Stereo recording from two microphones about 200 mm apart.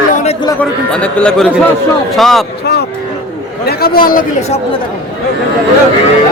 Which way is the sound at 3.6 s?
50° left (ahead or behind).